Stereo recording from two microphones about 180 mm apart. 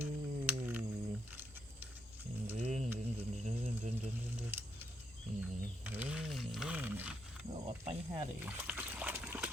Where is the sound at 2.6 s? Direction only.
40° right (ahead or behind).